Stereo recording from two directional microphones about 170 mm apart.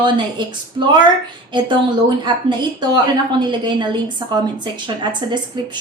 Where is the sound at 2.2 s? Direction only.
25° right (ahead or behind).